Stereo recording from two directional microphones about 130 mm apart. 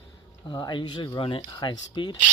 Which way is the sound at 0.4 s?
30° left (ahead or behind).